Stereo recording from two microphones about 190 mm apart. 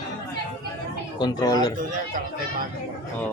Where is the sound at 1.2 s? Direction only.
20° left (ahead or behind).